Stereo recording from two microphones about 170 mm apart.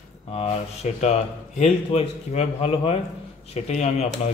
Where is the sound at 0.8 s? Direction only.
45° left (ahead or behind).